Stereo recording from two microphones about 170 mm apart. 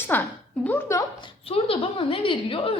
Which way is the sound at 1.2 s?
35° left (ahead or behind).